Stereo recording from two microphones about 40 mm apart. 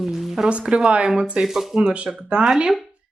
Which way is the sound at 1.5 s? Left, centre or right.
Centre.